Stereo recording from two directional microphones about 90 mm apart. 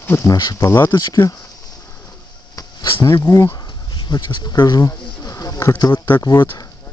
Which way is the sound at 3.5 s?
50° left (ahead or behind).